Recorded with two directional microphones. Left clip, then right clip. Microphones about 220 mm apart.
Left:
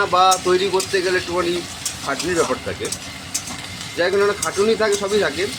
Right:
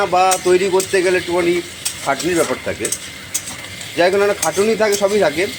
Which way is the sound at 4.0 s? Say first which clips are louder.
Right 4 dB; 5° right (ahead or behind).